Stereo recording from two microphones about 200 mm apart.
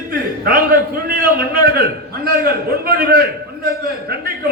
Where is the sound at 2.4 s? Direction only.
50° right (ahead or behind).